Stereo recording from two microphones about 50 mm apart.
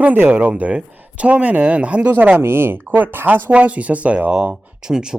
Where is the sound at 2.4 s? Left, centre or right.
Right.